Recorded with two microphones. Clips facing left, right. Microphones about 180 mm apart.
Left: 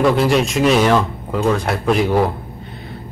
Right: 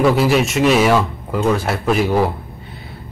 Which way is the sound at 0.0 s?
5° right (ahead or behind).